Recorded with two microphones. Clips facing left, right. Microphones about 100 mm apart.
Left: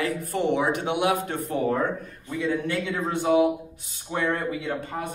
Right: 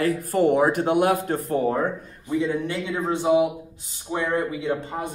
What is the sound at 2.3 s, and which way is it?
A man's voice, 20° right (ahead or behind).